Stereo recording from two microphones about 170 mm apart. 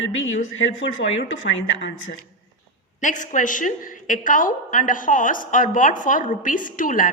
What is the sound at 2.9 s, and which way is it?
A woman's voice, 50° left (ahead or behind).